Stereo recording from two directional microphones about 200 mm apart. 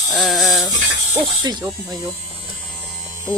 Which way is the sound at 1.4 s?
20° right (ahead or behind).